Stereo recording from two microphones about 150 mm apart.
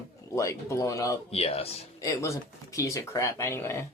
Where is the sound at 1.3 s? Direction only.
40° left (ahead or behind).